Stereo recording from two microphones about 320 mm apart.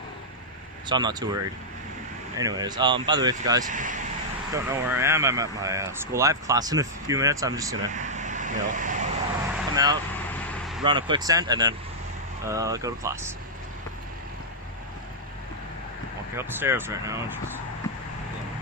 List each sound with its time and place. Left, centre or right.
0.9 s speech: centre
2.4 s speech: centre
3.7 s speech: right
4.5 s speech: centre
7.9 s vehicle: right
9.7 s speech: centre
10.3 s vehicle: centre
10.8 s speech: centre
16.4 s speech: centre